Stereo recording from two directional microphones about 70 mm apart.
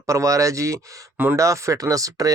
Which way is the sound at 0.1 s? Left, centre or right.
Right.